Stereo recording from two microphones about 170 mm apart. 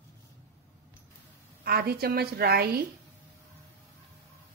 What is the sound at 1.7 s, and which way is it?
A woman's voice, 65° right (ahead or behind).